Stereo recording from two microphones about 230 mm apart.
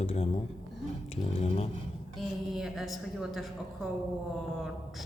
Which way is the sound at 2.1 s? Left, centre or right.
Centre.